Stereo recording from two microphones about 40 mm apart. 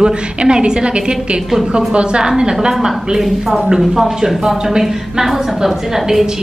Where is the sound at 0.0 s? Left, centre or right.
Right.